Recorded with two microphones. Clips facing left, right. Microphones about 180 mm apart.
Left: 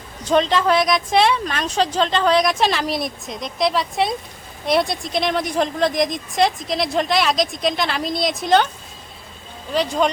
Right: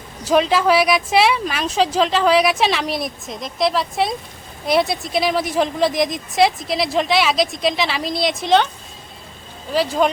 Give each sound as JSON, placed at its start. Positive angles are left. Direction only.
{"t": 0.3, "sound": "a woman's voice", "side_deg": -5}
{"t": 9.7, "sound": "a woman's voice", "side_deg": -5}